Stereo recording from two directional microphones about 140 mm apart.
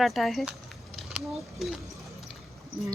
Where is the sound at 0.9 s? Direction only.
Centre (ahead or behind).